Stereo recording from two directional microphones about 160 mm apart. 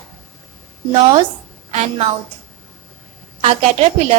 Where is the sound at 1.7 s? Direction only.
40° right (ahead or behind).